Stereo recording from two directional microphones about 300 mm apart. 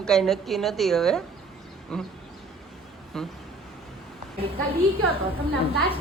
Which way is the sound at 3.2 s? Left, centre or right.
Centre.